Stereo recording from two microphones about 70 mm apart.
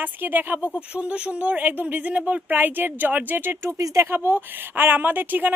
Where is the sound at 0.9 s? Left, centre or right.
Centre.